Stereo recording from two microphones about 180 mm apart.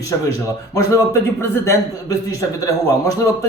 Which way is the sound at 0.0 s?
20° left (ahead or behind).